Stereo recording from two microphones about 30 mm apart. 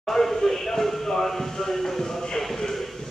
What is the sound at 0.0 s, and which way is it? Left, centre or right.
Speech, centre.